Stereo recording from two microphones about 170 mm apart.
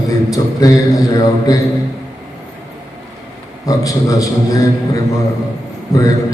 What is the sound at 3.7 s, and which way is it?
Speech, 20° left (ahead or behind).